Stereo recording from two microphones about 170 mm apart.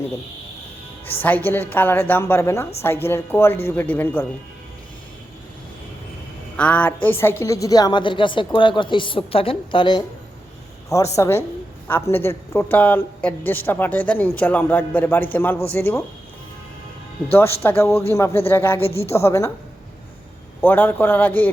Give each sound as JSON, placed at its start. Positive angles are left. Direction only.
{"t": 1.2, "sound": "speech", "side_deg": 10}
{"t": 6.6, "sound": "a woman's voice", "side_deg": 10}
{"t": 17.3, "sound": "speech", "side_deg": 15}
{"t": 20.6, "sound": "speech", "side_deg": 10}